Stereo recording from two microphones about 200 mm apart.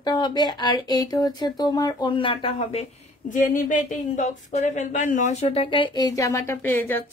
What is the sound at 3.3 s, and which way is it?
Speech, 40° left (ahead or behind).